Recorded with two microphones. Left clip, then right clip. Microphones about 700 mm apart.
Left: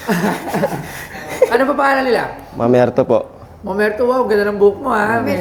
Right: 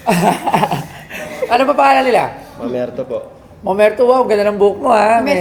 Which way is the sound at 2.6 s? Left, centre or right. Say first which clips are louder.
Left 8 dB; left.